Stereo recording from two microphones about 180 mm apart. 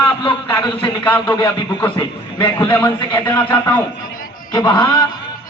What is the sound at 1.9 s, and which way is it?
Speech, 25° left (ahead or behind).